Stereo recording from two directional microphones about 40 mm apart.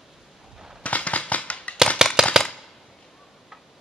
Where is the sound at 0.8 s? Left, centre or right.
Left.